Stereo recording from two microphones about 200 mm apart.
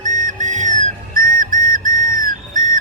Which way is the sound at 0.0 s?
40° right (ahead or behind).